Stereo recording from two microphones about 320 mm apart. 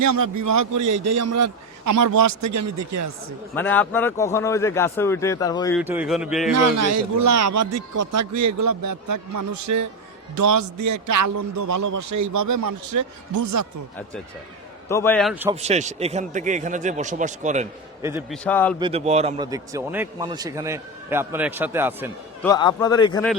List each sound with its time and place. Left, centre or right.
0.1 s a man's voice: right
3.5 s a man's voice: centre
5.8 s a man's voice: centre
6.7 s a man's voice: right
14.8 s a man's voice: centre
15.6 s a man's voice: right
18.0 s a man's voice: centre
18.4 s a man's voice: centre
18.8 s a man's voice: centre
22.4 s a man's voice: centre